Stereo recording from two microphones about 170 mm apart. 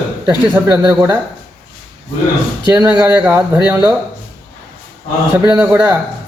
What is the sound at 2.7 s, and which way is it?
A man's voice, 15° right (ahead or behind).